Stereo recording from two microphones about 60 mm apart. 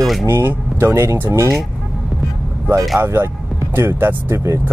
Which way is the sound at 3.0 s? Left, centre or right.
Right.